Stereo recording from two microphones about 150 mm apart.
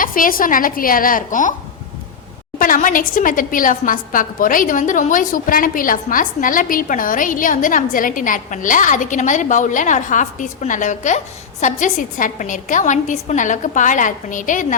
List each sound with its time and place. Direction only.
0.0 s a woman's voice: 65° left (ahead or behind)
2.6 s a woman's voice: 65° left (ahead or behind)